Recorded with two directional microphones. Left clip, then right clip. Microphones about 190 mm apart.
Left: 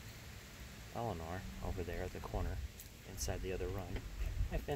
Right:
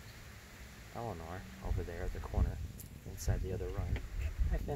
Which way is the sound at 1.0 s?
5° right (ahead or behind).